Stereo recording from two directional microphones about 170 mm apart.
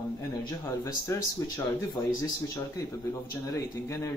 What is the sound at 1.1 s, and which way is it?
Speech, 15° left (ahead or behind).